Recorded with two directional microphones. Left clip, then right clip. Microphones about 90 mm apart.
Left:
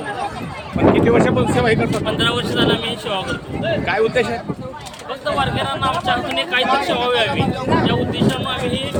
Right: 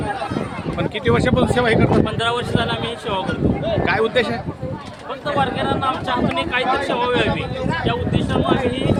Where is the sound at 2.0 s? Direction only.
40° right (ahead or behind).